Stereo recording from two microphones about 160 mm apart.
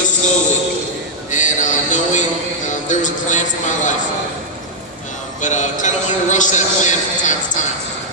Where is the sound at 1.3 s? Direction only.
50° left (ahead or behind).